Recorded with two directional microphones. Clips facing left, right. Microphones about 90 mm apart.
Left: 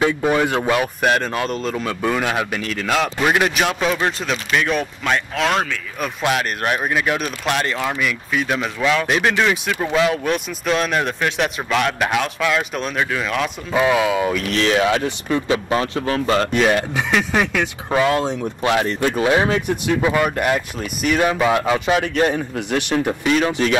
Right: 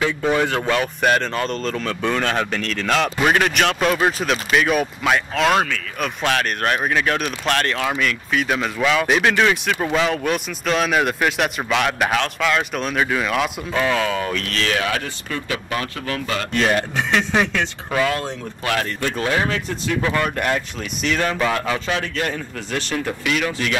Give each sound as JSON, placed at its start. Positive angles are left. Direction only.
{"t": 0.0, "sound": "speech", "side_deg": 20}
{"t": 13.7, "sound": "speech", "side_deg": 10}
{"t": 16.5, "sound": "speech", "side_deg": 5}
{"t": 17.9, "sound": "speech", "side_deg": 20}